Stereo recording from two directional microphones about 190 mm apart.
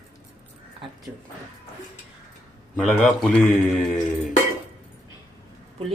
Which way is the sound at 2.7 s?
5° left (ahead or behind).